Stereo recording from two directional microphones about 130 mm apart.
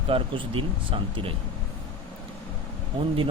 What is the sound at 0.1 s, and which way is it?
Speech, 40° right (ahead or behind).